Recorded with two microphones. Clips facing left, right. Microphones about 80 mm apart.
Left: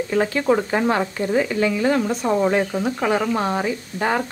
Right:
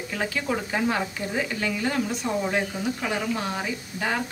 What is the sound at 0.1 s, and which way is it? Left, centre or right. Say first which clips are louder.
Frying: left 7 dB; left.